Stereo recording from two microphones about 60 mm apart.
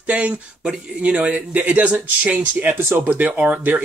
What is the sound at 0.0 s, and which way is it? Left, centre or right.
Speech, right.